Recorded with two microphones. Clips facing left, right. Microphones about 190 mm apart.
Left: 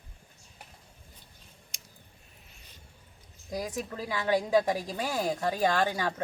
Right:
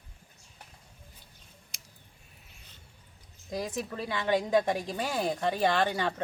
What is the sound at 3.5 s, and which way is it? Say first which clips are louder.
A woman's voice: even; 10° left (ahead or behind).